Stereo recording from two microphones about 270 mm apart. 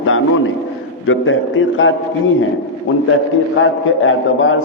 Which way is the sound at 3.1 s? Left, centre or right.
Left.